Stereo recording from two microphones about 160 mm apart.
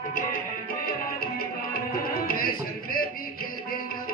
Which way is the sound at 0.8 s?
70° left (ahead or behind).